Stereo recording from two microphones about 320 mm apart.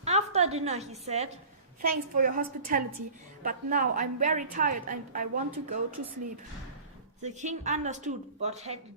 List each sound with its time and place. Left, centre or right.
0.0 s a woman's voice: centre
7.2 s a woman's voice: right